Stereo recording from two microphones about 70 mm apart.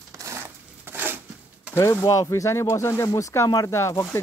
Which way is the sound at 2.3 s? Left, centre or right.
Left.